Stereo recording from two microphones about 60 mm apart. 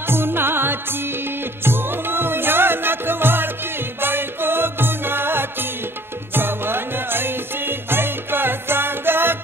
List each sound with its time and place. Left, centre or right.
0.0 s music: right